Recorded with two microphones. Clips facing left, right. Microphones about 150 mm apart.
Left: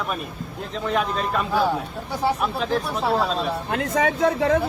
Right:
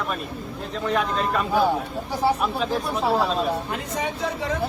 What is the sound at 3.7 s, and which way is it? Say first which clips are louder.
Speech: left 6 dB; 60° left (ahead or behind).